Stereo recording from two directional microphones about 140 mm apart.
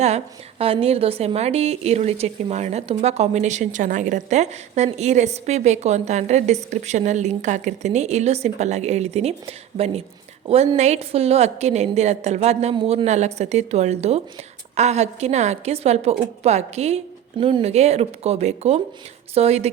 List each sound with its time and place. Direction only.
0.6 s a woman's voice: 45° right (ahead or behind)
12.7 s speech: 40° right (ahead or behind)
17.3 s speech: 40° right (ahead or behind)